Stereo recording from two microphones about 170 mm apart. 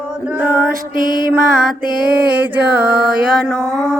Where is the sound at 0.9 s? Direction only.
55° right (ahead or behind).